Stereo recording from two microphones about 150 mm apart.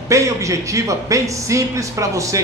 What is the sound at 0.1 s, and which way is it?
Speech, 20° right (ahead or behind).